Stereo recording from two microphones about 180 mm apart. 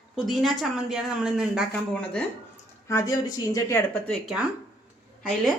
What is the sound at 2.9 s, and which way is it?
Speech, 20° left (ahead or behind).